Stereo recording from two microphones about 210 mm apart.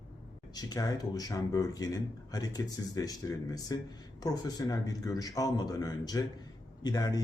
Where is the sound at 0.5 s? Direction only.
15° left (ahead or behind).